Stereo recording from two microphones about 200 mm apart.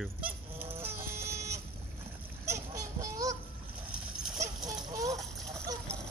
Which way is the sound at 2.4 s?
15° right (ahead or behind).